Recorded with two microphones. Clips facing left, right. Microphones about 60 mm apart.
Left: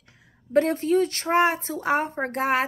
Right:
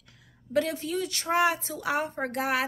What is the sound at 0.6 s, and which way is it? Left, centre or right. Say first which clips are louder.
Speech: left 9 dB; left.